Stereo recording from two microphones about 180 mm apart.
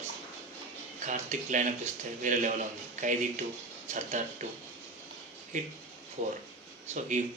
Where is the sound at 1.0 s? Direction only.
45° right (ahead or behind).